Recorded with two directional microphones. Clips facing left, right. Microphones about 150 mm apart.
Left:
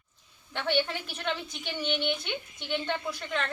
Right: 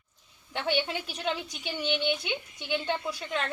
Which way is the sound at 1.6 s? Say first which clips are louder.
Right 1 dB; 10° right (ahead or behind).